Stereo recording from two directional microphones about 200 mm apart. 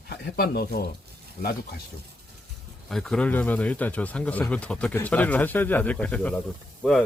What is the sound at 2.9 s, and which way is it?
A man's voice, centre (ahead or behind).